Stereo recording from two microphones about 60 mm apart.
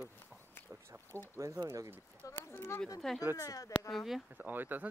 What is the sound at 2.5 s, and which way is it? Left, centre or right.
Speech, left.